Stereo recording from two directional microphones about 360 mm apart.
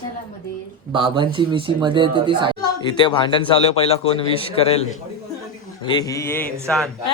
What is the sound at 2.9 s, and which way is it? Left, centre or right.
A man's voice, centre.